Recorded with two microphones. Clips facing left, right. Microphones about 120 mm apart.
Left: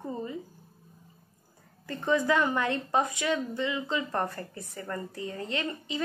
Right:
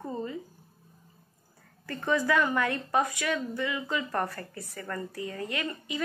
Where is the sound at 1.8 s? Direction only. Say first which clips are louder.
Left 1 dB; 20° left (ahead or behind).